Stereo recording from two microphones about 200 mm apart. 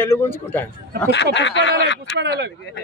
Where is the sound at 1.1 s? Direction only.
60° left (ahead or behind).